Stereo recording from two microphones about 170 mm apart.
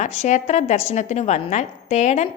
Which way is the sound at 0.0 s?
45° left (ahead or behind).